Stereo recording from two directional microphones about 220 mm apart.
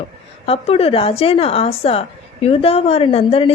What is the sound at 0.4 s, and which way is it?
Speech, 25° left (ahead or behind).